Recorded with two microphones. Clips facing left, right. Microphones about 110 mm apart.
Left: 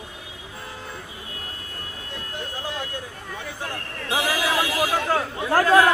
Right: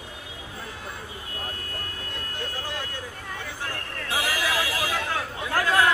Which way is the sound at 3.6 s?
20° left (ahead or behind).